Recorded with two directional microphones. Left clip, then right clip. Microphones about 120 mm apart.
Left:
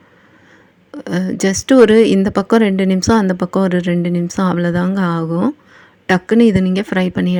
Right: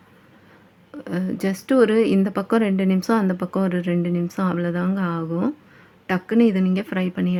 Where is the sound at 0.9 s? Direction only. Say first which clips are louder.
Left 7 dB; 40° left (ahead or behind).